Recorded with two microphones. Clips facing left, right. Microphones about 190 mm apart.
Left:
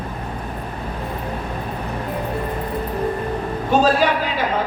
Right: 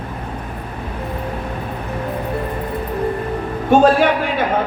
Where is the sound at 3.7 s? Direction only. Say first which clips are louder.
Right 5 dB; 55° right (ahead or behind).